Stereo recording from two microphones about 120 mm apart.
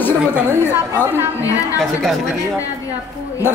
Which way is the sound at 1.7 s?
Centre (ahead or behind).